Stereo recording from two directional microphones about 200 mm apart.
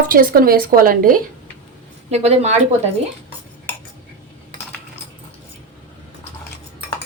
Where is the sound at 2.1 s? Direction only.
35° right (ahead or behind).